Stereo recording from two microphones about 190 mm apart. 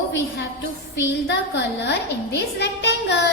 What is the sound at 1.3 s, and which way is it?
A woman's voice, 65° left (ahead or behind).